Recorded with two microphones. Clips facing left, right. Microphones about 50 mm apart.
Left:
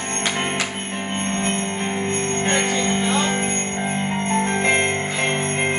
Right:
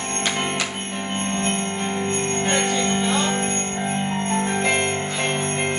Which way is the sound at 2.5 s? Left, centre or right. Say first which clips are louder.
Left 1 dB; centre.